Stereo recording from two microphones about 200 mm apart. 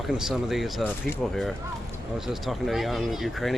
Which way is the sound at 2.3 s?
Centre (ahead or behind).